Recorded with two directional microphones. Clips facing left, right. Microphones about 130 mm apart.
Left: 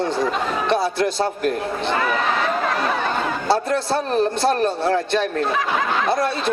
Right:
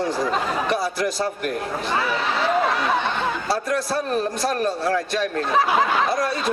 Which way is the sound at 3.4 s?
25° left (ahead or behind).